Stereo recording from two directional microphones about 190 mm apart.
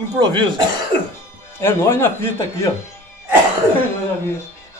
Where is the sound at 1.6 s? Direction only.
10° left (ahead or behind).